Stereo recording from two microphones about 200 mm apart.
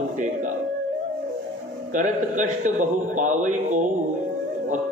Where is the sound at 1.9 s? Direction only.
40° right (ahead or behind).